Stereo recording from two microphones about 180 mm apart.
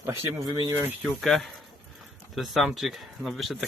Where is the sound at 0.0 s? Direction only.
15° right (ahead or behind).